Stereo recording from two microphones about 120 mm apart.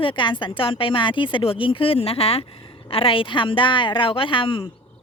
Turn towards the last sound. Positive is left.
turn(degrees=45)  # may be behind; listen again after turning